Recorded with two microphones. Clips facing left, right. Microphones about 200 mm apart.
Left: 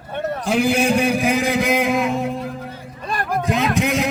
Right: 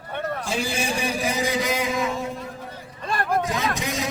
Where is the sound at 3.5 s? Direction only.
60° left (ahead or behind).